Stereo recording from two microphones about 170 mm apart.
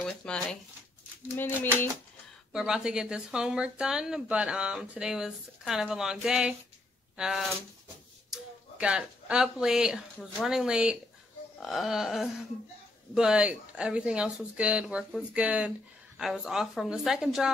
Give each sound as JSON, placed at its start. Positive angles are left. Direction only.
{"t": 0.0, "sound": "a sound", "side_deg": 5}
{"t": 1.3, "sound": "speech", "side_deg": 15}
{"t": 2.5, "sound": "speech", "side_deg": -5}